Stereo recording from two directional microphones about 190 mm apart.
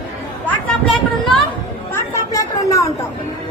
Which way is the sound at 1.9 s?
15° left (ahead or behind).